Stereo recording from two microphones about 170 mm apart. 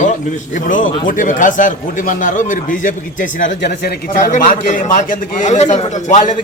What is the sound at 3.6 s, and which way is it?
Speech, 85° left.